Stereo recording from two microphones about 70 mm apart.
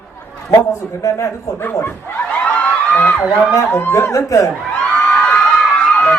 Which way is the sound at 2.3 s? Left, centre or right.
Centre.